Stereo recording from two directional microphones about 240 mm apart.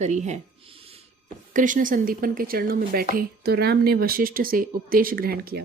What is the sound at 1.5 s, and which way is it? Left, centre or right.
Speech, right.